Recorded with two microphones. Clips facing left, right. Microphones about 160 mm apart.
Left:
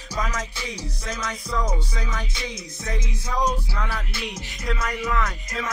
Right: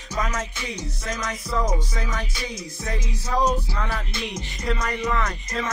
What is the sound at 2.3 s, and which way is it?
Music, 25° left (ahead or behind).